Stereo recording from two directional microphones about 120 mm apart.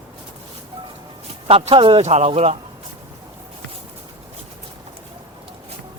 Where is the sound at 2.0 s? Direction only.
65° right (ahead or behind).